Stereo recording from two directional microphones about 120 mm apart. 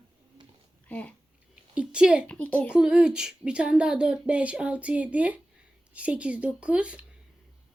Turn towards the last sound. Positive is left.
turn(degrees=-10)  # may be behind; listen again after turning